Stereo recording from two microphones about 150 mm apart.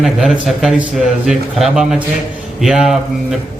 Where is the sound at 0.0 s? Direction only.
Centre (ahead or behind).